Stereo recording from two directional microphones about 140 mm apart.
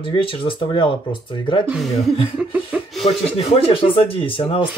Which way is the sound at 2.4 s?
10° right (ahead or behind).